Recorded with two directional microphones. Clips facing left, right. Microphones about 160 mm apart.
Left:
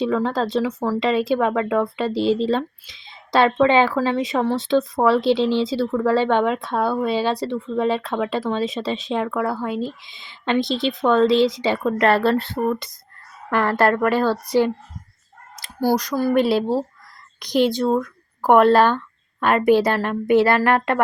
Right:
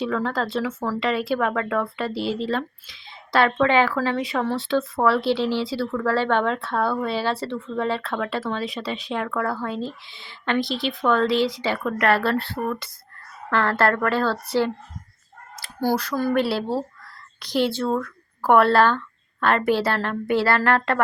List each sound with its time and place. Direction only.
0.0 s speech: 20° left (ahead or behind)